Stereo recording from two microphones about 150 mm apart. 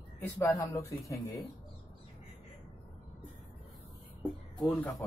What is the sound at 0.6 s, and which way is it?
Speech, 20° left (ahead or behind).